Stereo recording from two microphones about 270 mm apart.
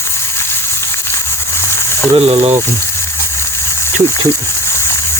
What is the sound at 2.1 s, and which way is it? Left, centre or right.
Speech, right.